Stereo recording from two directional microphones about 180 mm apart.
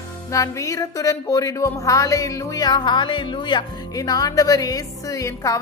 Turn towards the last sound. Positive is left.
turn(degrees=20)  # may be behind; listen again after turning